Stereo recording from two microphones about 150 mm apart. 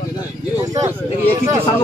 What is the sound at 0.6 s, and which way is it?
Speech, 20° right (ahead or behind).